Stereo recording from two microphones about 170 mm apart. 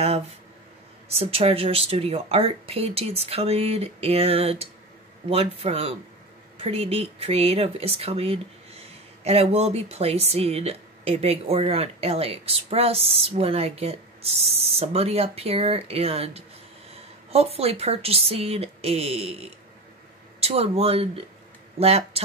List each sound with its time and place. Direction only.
1.0 s speech: 35° right (ahead or behind)